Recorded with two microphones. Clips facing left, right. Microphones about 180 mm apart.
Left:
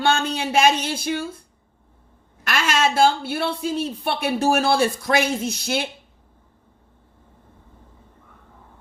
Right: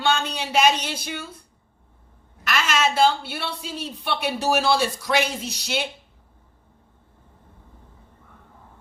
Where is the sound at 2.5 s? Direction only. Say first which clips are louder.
Left 2 dB; 50° left (ahead or behind).